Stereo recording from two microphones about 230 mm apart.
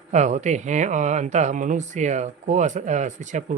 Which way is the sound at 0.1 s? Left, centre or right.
Right.